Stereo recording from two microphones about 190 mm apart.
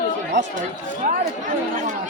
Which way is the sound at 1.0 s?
50° right (ahead or behind).